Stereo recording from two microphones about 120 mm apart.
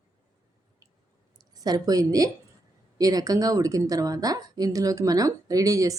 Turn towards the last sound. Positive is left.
turn(degrees=-30)  # may be behind; listen again after turning